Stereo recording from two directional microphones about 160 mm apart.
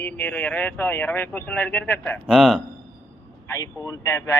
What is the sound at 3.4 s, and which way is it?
Speech, 20° left (ahead or behind).